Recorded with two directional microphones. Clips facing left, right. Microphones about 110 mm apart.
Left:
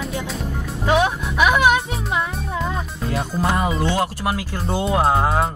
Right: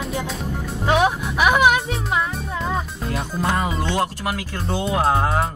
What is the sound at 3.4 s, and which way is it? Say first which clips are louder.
Speech: left 2 dB; 20° left (ahead or behind).